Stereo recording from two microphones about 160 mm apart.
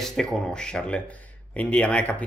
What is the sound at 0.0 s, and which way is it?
Speech, 5° left (ahead or behind).